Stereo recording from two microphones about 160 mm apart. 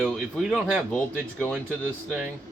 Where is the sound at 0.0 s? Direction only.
5° left (ahead or behind).